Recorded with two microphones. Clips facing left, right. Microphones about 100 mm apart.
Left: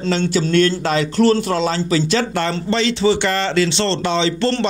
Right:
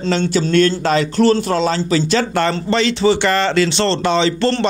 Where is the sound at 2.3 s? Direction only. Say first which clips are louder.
Right 3 dB; 60° right (ahead or behind).